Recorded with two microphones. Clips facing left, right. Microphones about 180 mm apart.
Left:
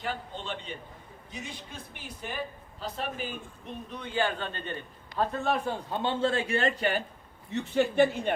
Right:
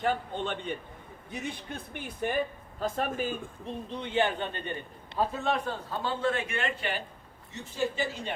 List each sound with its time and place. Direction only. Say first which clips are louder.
0.0 s a man's voice: right 6 dB; 50° right (ahead or behind)
3.7 s a man's voice: right 3 dB; 30° right (ahead or behind); by 7.0 s 40° left (ahead or behind)
7.5 s speech: left 7 dB; 60° left (ahead or behind)